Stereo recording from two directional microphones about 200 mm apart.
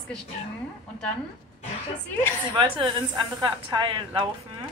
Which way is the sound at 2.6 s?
25° right (ahead or behind).